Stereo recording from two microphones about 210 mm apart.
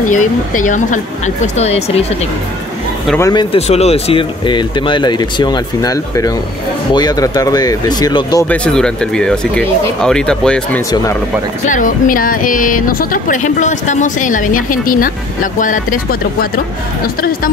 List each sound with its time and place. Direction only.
0.0 s speech: 35° left (ahead or behind)
3.2 s speech: 15° left (ahead or behind)
3.5 s speech: 30° left (ahead or behind)
8.5 s speech: 5° left (ahead or behind)
11.6 s speech: 40° left (ahead or behind)